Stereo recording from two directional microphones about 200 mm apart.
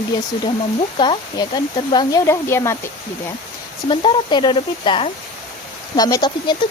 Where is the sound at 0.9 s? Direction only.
25° left (ahead or behind).